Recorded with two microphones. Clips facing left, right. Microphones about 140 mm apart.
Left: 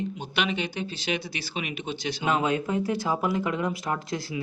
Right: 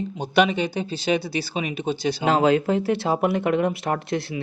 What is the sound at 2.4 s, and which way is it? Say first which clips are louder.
Speech: right 7 dB; 90° right.